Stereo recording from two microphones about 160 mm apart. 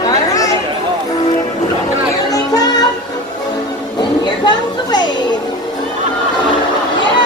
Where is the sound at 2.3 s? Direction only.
25° left (ahead or behind).